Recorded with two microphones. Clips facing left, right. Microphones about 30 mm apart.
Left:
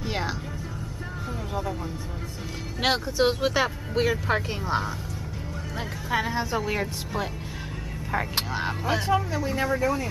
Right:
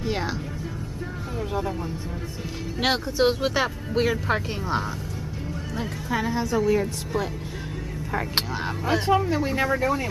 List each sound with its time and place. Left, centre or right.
0.0 s music: centre
2.8 s speech: centre
5.8 s a woman's voice: centre
8.5 s speech: centre
9.0 s speech: right